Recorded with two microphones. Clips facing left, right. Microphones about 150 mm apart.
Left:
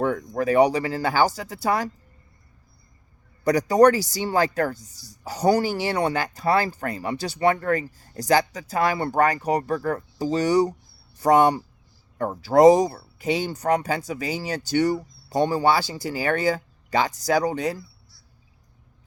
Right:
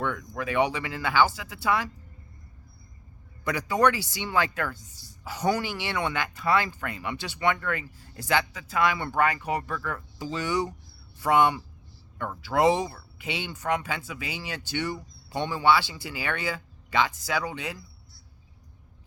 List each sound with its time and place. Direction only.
0.0 s speech: 40° left (ahead or behind)
3.4 s speech: 40° left (ahead or behind)